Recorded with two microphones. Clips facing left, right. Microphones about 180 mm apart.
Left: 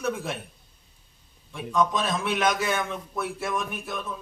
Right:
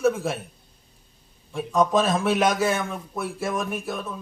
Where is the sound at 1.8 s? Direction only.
45° right (ahead or behind).